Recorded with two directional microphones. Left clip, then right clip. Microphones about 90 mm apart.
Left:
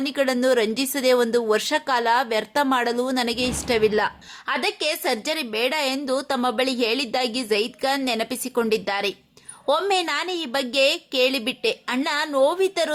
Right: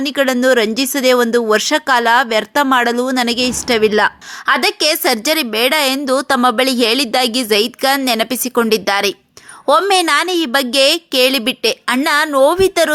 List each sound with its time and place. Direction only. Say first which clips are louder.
0.0 s speech: right 7 dB; 35° right (ahead or behind)